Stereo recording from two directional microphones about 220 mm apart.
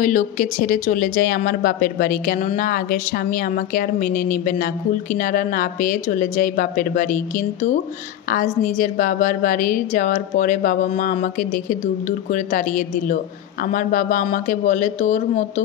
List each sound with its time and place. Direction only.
0.0 s speech: 35° left (ahead or behind)